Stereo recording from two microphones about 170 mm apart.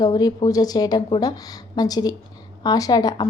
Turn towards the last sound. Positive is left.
turn(degrees=20)  # may be behind; listen again after turning